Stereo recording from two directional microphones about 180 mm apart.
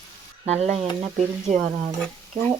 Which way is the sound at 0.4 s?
35° right (ahead or behind).